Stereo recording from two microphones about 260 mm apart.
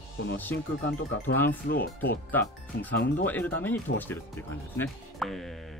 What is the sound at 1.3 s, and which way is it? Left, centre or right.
Speech, centre.